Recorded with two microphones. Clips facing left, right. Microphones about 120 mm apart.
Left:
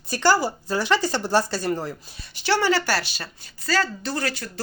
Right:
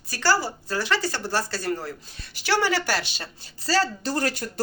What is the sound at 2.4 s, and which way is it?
Speech, 15° right (ahead or behind).